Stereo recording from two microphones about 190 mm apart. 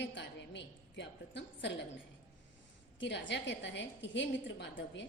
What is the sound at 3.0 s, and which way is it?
A woman's voice, 70° left (ahead or behind).